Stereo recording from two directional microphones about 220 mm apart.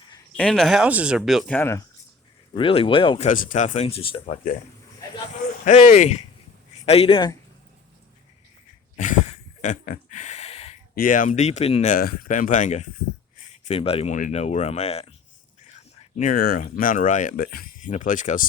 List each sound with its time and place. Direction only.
0.3 s speech: 5° left (ahead or behind)
2.6 s speech: 25° left (ahead or behind)
5.6 s speech: 35° left (ahead or behind)
9.0 s a sound: 35° left (ahead or behind)
10.9 s speech: 40° left (ahead or behind)